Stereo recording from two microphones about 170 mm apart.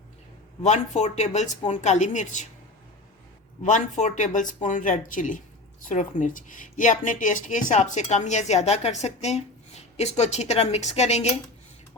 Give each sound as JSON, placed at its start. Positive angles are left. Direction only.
{"t": 0.6, "sound": "speech", "side_deg": 40}
{"t": 3.6, "sound": "a woman's voice", "side_deg": 45}